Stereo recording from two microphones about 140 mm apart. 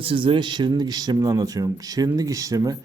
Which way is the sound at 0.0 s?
40° right (ahead or behind).